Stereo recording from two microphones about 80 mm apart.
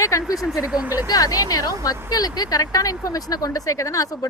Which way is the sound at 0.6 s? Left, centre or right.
Centre.